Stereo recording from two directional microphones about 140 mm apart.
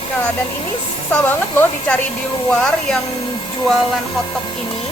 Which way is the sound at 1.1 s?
10° left (ahead or behind).